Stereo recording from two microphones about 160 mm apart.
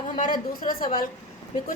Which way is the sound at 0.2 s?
60° left (ahead or behind).